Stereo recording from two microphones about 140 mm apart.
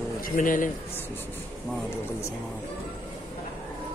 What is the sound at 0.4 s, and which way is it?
Speech, 70° left (ahead or behind).